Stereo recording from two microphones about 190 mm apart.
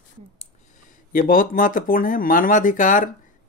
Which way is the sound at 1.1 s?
45° left (ahead or behind).